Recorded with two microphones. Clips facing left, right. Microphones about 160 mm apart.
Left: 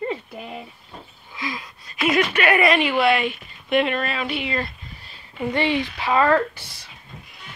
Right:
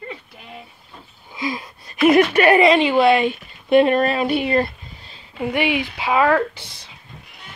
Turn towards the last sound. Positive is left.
turn(degrees=-15)  # may be behind; listen again after turning